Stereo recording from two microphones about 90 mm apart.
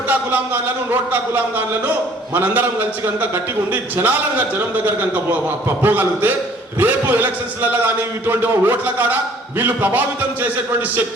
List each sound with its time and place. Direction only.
0.1 s a man's voice: 20° right (ahead or behind)